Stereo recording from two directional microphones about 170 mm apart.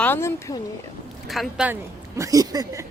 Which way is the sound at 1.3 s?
Centre (ahead or behind).